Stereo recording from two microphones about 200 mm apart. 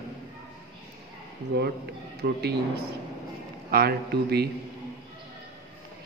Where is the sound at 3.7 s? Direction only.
50° right (ahead or behind).